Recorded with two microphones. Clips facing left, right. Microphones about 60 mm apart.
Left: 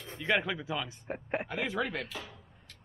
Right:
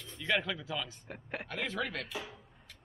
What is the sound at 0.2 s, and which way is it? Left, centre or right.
Speech, left.